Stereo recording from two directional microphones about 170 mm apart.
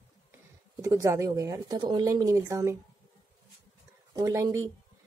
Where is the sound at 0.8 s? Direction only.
20° right (ahead or behind).